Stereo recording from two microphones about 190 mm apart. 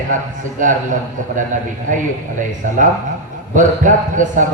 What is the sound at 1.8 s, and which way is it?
A man's voice, 40° right (ahead or behind).